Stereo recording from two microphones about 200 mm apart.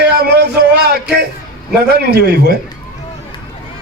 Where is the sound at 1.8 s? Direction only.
55° right (ahead or behind).